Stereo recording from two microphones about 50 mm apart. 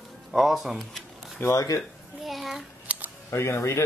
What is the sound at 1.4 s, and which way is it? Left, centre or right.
Speech, left.